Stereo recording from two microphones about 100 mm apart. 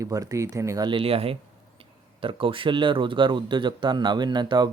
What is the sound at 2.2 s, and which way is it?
A man's voice, 60° right (ahead or behind).